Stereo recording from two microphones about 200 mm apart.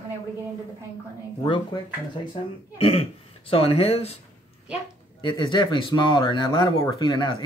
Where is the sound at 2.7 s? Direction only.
30° left (ahead or behind).